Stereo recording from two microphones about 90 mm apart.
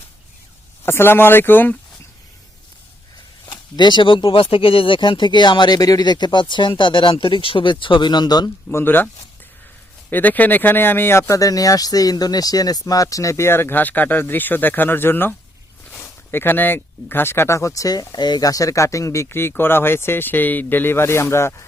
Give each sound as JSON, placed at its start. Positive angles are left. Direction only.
{"t": 0.9, "sound": "speech", "side_deg": 25}
{"t": 3.4, "sound": "speech", "side_deg": 55}
{"t": 8.7, "sound": "speech", "side_deg": 25}
{"t": 10.1, "sound": "speech", "side_deg": 20}